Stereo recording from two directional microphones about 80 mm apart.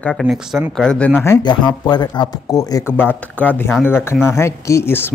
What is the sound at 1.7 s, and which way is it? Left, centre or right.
Speech, left.